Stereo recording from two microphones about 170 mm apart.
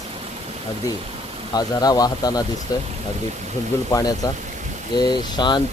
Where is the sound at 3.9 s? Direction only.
20° left (ahead or behind).